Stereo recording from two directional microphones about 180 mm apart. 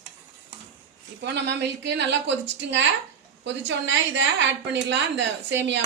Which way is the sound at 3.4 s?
90° right.